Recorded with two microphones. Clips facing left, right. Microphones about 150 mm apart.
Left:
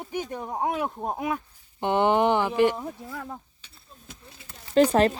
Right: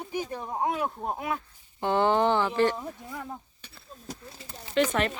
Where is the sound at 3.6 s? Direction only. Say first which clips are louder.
Right 5 dB; 75° right (ahead or behind).